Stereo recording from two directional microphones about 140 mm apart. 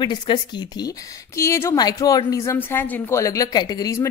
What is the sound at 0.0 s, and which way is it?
A woman's voice, 35° left (ahead or behind).